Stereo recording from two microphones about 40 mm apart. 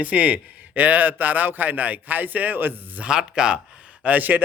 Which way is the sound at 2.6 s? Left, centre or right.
Right.